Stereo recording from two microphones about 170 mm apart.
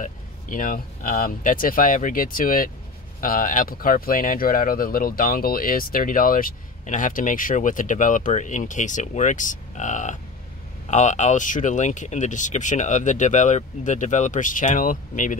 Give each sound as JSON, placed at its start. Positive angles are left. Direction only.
{"t": 0.0, "sound": "speech", "side_deg": 50}